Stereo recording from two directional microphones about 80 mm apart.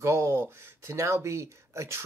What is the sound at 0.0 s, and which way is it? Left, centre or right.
Speech, right.